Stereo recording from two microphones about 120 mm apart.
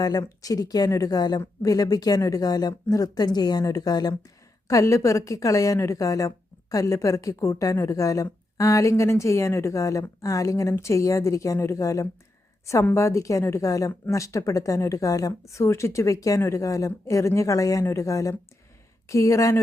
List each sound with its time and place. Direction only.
0.0 s a woman's voice: 30° left (ahead or behind)